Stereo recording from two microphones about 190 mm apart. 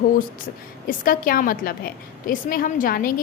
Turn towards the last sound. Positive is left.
turn(degrees=50)  # may be behind; listen again after turning